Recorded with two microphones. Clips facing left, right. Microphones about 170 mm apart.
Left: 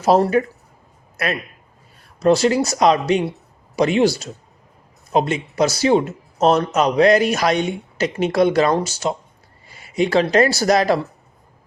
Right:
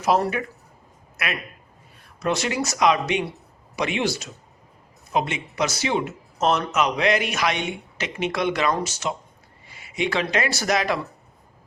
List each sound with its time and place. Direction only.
0.0 s a man's voice: 30° left (ahead or behind)